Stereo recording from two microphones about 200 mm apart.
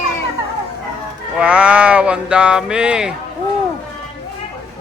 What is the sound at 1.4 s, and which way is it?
Speech, 5° right (ahead or behind).